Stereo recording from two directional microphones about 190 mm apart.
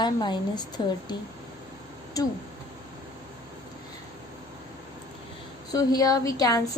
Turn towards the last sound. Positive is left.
turn(degrees=20)  # may be behind; listen again after turning